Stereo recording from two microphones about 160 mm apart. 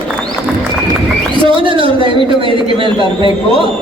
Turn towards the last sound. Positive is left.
turn(degrees=-35)  # may be behind; listen again after turning